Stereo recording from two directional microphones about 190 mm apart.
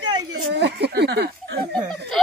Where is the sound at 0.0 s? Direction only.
25° right (ahead or behind).